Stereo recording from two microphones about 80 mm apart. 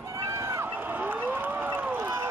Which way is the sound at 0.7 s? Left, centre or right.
Right.